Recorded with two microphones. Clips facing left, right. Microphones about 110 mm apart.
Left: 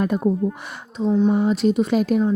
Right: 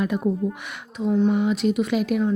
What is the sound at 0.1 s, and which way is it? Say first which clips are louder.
Speech: left 3 dB; 35° left (ahead or behind).